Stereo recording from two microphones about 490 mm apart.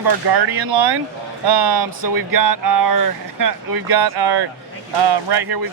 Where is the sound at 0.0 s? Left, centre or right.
Right.